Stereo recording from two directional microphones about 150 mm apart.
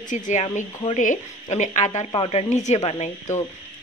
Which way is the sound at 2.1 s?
40° left (ahead or behind).